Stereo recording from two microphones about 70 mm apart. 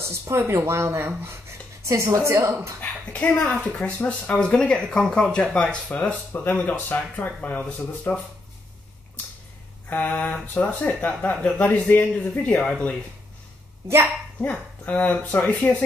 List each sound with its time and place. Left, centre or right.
0.1 s a woman's voice: right
2.8 s speech: centre
8.1 s speech: left
9.8 s speech: left
14.4 s speech: left